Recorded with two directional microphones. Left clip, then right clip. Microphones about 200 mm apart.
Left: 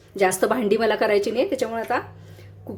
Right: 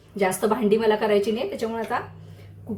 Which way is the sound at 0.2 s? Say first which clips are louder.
Left 2 dB; 50° left (ahead or behind).